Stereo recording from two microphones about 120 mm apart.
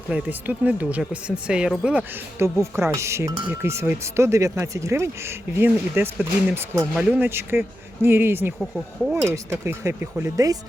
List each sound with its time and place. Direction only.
0.1 s speech: 10° right (ahead or behind)
2.4 s speech: 20° right (ahead or behind)